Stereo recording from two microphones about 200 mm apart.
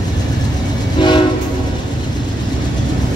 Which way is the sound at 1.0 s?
20° left (ahead or behind).